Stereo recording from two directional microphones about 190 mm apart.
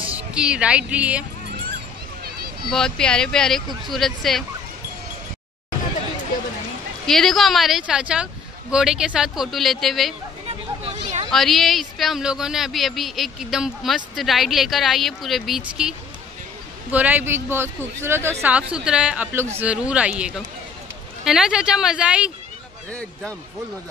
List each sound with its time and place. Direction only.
0.1 s speech: 5° right (ahead or behind)
2.2 s a sound: 55° right (ahead or behind)
2.7 s speech: 5° left (ahead or behind)
7.1 s speech: centre (ahead or behind)
10.8 s a sound: 35° right (ahead or behind)
11.2 s speech: centre (ahead or behind)
16.9 s a man's voice: 10° right (ahead or behind)
22.8 s speech: 5° left (ahead or behind)